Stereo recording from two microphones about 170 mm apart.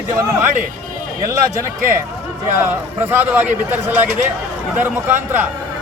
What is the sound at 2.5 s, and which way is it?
Speech, 15° right (ahead or behind).